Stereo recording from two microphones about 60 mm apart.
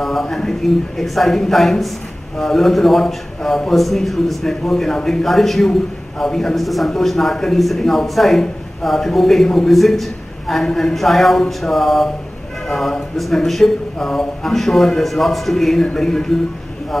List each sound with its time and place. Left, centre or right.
0.0 s a man's voice: centre